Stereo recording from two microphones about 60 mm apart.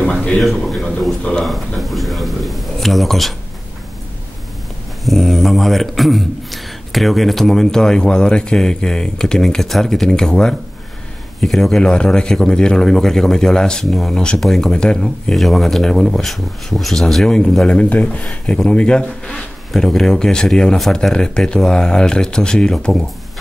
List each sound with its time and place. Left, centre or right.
0.0 s a sound: centre
0.4 s speech: centre
5.0 s a man's voice: centre
14.4 s speech: centre
14.7 s a man's voice: centre
15.3 s speech: centre
17.7 s a man's voice: centre